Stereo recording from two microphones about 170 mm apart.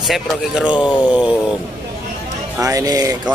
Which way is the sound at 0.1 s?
5° right (ahead or behind).